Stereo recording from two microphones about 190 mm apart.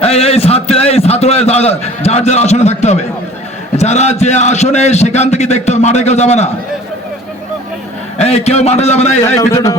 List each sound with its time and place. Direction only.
0.0 s a man's voice: 30° left (ahead or behind)
8.2 s a man's voice: 35° left (ahead or behind)
9.2 s speech: 15° left (ahead or behind)